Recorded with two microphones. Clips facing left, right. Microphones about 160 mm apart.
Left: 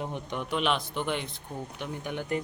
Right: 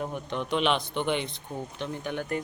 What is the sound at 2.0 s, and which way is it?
Speech, 15° left (ahead or behind).